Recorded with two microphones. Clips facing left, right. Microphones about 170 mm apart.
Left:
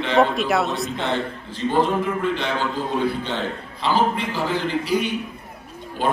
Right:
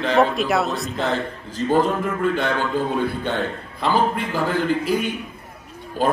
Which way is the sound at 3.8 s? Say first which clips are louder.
Right 1 dB; 50° right (ahead or behind).